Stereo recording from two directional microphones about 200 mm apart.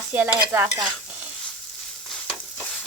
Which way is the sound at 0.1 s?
10° right (ahead or behind).